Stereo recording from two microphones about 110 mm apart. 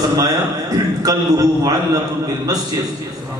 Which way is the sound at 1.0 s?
35° right (ahead or behind).